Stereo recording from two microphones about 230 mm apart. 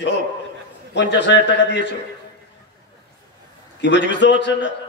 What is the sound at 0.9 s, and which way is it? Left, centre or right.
A man's voice, left.